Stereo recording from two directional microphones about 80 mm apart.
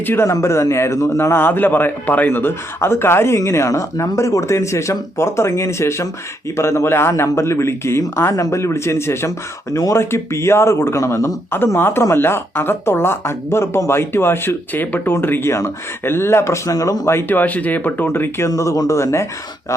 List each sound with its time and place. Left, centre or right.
0.3 s a man's voice: left
16.7 s speech: left
17.1 s speech: left